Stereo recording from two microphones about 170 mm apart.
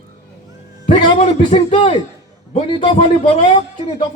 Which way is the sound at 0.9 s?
30° left (ahead or behind).